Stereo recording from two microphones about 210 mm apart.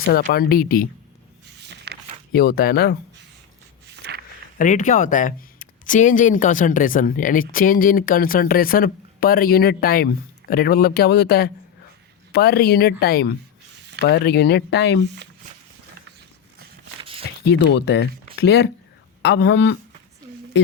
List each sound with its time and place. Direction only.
0.0 s speech: 45° left (ahead or behind)
1.6 s a sound: 50° right (ahead or behind)
2.3 s speech: 50° left (ahead or behind)
3.9 s walk: 55° right (ahead or behind)
4.5 s speech: 40° left (ahead or behind); by 15.0 s 55° left (ahead or behind)
17.0 s a sound: 25° right (ahead or behind)
17.4 s speech: 55° left (ahead or behind)